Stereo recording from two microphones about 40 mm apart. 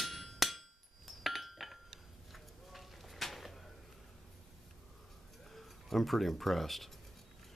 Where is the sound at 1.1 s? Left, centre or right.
Centre.